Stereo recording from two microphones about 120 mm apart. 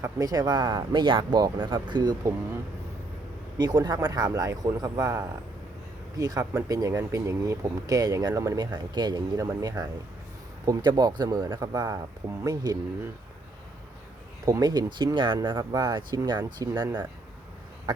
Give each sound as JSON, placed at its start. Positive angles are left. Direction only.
{"t": 0.0, "sound": "speech", "side_deg": -30}
{"t": 3.6, "sound": "speech", "side_deg": -35}
{"t": 14.4, "sound": "speech", "side_deg": -30}